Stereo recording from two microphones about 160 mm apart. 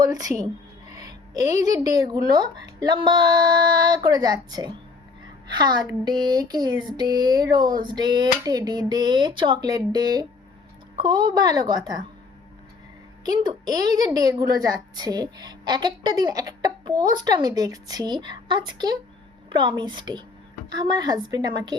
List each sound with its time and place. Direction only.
0.0 s music: 25° right (ahead or behind)
1.6 s a woman's voice: 25° right (ahead or behind)
13.2 s a woman's voice: 25° right (ahead or behind)